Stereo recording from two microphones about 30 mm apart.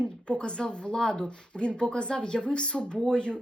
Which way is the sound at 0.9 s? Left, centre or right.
Left.